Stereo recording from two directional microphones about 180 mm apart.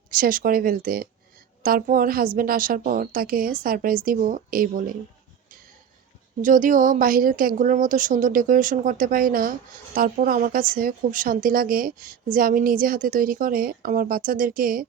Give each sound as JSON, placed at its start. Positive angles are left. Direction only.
{"t": 0.1, "sound": "speech", "side_deg": -50}
{"t": 6.4, "sound": "speech", "side_deg": -45}